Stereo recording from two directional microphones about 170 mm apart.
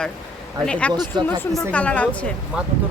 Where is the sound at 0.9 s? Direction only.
25° right (ahead or behind).